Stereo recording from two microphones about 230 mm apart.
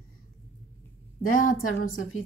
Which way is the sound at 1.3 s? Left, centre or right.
Left.